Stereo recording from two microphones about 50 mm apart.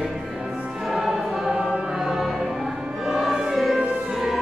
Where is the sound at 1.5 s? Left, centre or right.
Centre.